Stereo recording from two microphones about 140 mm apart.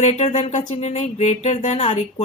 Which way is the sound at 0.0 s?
55° left (ahead or behind).